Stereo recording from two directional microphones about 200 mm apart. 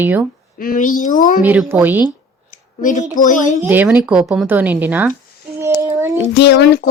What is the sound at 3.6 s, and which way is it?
Speech, 10° right (ahead or behind).